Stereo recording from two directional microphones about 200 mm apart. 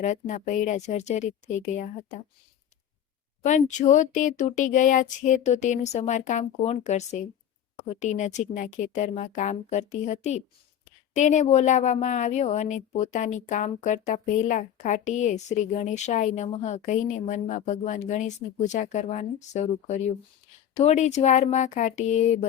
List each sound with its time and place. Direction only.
0.0 s a woman's voice: 35° left (ahead or behind)
3.4 s a woman's voice: 35° left (ahead or behind)